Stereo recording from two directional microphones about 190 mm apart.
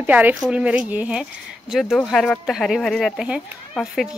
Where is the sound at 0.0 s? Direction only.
10° right (ahead or behind).